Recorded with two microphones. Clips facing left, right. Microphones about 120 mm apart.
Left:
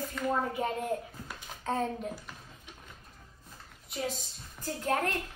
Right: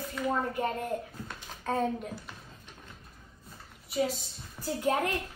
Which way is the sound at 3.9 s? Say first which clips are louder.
Right 6 dB; 5° right (ahead or behind).